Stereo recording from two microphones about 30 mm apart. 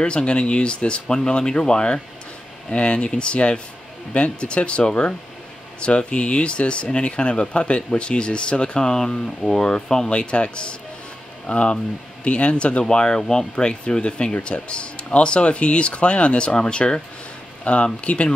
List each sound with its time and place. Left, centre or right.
0.0 s speech: left
1.0 s speech: left
2.7 s speech: left
5.9 s speech: left
10.0 s speech: left
12.8 s speech: left
13.2 s speech: centre
13.6 s speech: left
17.7 s speech: left